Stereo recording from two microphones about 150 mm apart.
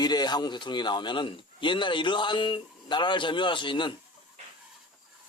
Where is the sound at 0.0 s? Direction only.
30° left (ahead or behind).